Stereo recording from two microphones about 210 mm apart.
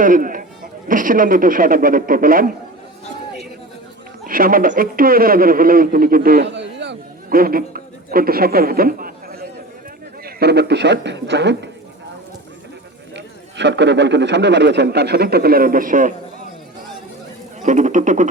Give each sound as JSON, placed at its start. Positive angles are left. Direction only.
{"t": 0.0, "sound": "speech", "side_deg": -40}
{"t": 4.3, "sound": "speech", "side_deg": -40}
{"t": 13.1, "sound": "speech", "side_deg": -55}
{"t": 17.6, "sound": "speech", "side_deg": -35}